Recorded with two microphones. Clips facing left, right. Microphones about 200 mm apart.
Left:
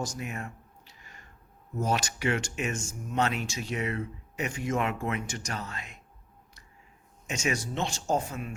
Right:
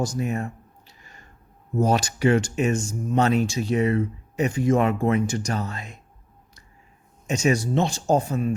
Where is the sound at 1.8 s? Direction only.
35° right (ahead or behind).